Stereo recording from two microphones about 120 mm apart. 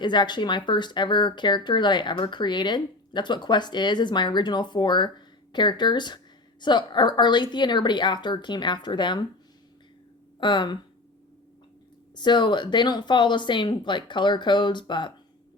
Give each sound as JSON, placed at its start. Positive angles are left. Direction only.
{"t": 0.0, "sound": "speech", "side_deg": 40}
{"t": 10.4, "sound": "speech", "side_deg": 40}
{"t": 12.1, "sound": "speech", "side_deg": 40}